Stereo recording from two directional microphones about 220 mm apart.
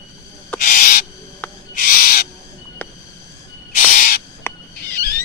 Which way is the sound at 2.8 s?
5° left (ahead or behind).